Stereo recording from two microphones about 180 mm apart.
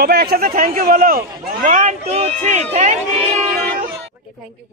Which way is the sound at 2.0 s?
35° right (ahead or behind).